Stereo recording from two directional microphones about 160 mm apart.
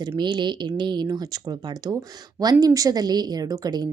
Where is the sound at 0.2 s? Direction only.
30° right (ahead or behind).